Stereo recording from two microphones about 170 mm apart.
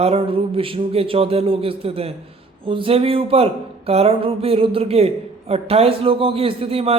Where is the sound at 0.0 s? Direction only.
35° right (ahead or behind).